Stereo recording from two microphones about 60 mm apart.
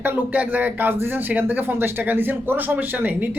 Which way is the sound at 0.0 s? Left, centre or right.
Right.